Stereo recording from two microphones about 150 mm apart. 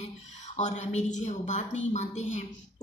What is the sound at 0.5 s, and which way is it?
A woman's voice, 50° left (ahead or behind).